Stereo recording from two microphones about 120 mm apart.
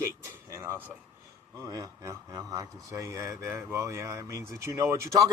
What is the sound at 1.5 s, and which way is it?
Speech, 30° right (ahead or behind).